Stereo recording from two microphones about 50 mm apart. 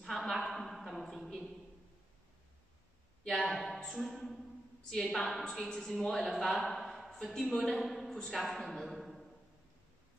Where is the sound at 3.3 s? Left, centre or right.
Centre.